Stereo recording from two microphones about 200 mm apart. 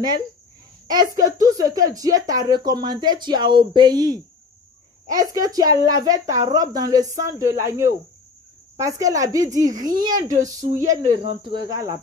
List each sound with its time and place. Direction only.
0.8 s a woman's voice: 20° right (ahead or behind)
11.0 s speech: 30° right (ahead or behind)